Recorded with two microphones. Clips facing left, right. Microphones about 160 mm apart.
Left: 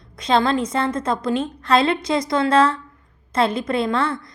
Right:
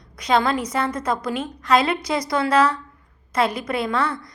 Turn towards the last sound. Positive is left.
turn(degrees=25)  # may be behind; listen again after turning